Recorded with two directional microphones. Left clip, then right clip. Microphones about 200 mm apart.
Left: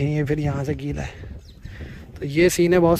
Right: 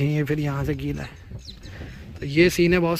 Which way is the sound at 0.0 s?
20° left (ahead or behind).